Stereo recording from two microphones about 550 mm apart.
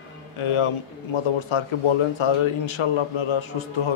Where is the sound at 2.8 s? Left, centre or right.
Left.